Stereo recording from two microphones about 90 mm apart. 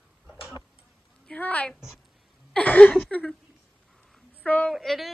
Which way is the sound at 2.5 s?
15° left (ahead or behind).